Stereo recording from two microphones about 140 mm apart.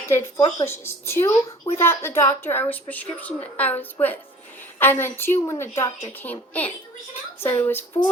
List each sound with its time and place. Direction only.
0.0 s a woman's voice: 15° left (ahead or behind)